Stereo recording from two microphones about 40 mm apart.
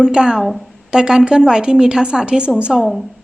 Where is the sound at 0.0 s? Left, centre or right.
Centre.